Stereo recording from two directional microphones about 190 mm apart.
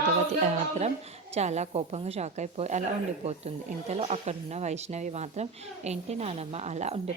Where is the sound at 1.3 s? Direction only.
35° right (ahead or behind).